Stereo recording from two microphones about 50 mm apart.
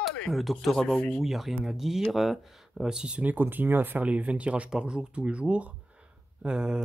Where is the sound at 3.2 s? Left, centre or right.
Right.